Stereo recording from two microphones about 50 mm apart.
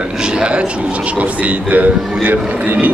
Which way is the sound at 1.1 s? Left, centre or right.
Right.